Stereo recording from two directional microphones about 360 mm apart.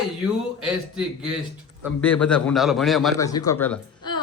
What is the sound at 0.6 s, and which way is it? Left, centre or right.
A man's voice, centre.